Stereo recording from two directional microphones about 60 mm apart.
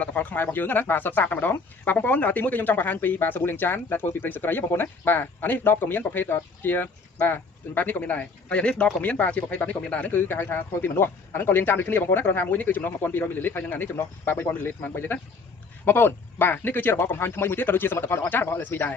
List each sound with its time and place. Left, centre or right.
0.0 s speech: left
10.2 s speech: left